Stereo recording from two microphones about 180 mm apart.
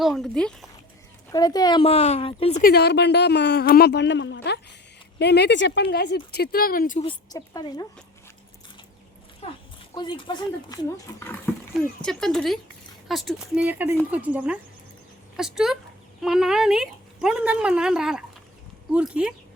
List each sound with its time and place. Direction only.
0.0 s speech: centre (ahead or behind)
1.3 s speech: 20° left (ahead or behind)
2.6 s speech: 60° left (ahead or behind)
7.0 s speech: 25° left (ahead or behind)
9.9 s speech: 25° left (ahead or behind)
11.8 s speech: 5° left (ahead or behind)